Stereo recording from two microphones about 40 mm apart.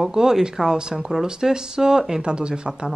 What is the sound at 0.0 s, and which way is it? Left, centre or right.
A man's voice, centre.